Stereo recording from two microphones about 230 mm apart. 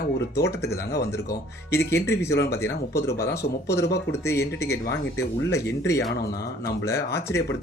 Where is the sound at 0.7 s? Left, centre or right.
Left.